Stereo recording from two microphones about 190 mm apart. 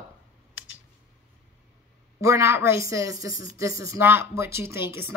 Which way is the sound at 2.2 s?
15° right (ahead or behind).